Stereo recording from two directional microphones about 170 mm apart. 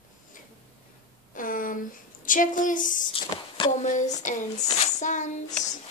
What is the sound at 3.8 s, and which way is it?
A woman's voice, 45° left (ahead or behind).